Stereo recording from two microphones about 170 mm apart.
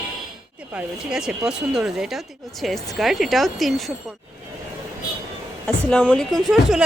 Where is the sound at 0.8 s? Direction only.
5° right (ahead or behind).